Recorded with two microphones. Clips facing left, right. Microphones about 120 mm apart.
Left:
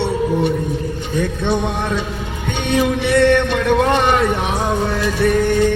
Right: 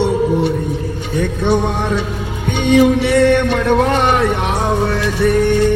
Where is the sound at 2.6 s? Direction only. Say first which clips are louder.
Right 6 dB; 10° right (ahead or behind).